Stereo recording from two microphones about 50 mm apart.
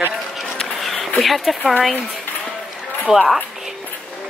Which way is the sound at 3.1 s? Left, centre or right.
Right.